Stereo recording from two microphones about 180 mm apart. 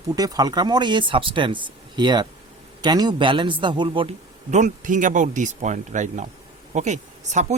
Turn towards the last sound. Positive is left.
turn(degrees=-40)  # may be behind; listen again after turning